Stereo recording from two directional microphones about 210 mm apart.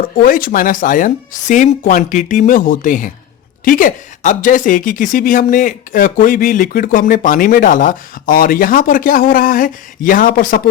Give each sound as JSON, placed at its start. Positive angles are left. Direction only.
{"t": 0.2, "sound": "speech", "side_deg": 40}